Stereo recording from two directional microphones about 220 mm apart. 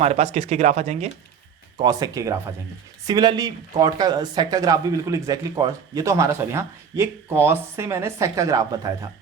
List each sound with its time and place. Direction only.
0.0 s speech: 30° right (ahead or behind)
1.8 s speech: 15° right (ahead or behind)